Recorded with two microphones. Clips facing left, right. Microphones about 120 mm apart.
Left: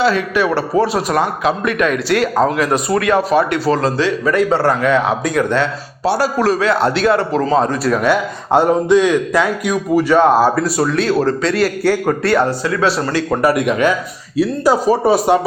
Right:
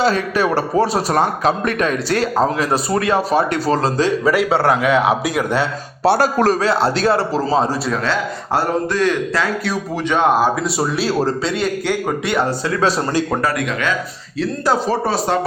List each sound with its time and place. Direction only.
0.0 s a man's voice: 40° right (ahead or behind)
4.2 s speech: 10° right (ahead or behind)
6.1 s speech: 50° right (ahead or behind)
6.7 s a man's voice: 35° right (ahead or behind)
8.0 s a man's voice: 15° left (ahead or behind)
10.2 s a man's voice: 15° right (ahead or behind); by 12.4 s centre (ahead or behind)
13.4 s speech: 25° left (ahead or behind)
14.3 s a man's voice: 10° left (ahead or behind)